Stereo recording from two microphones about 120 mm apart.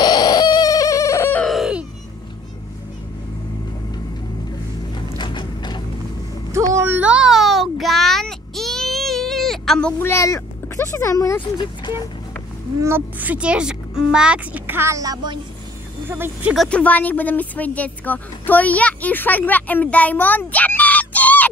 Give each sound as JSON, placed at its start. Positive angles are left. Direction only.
{"t": 0.0, "sound": "bird", "side_deg": 35}
{"t": 1.5, "sound": "a sound", "side_deg": -5}
{"t": 5.1, "sound": "a sound", "side_deg": 40}
{"t": 6.5, "sound": "a sound", "side_deg": -20}
{"t": 9.9, "sound": "speech", "side_deg": 20}
{"t": 11.5, "sound": "speech", "side_deg": 40}
{"t": 12.8, "sound": "speech", "side_deg": -15}
{"t": 16.1, "sound": "speech", "side_deg": -15}
{"t": 16.5, "sound": "speech", "side_deg": 10}